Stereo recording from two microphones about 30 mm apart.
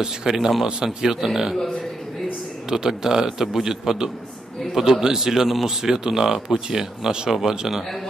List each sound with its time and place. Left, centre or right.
0.0 s speech: centre
2.7 s speech: centre